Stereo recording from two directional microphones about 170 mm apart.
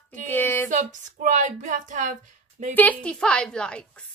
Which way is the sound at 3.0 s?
5° left (ahead or behind).